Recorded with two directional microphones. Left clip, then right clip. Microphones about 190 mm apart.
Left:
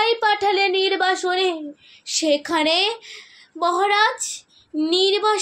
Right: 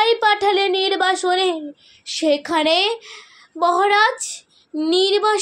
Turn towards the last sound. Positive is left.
turn(degrees=-30)  # may be behind; listen again after turning